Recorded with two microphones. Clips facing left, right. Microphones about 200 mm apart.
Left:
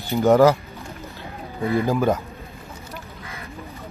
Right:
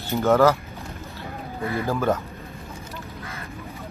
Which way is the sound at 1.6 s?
15° left (ahead or behind).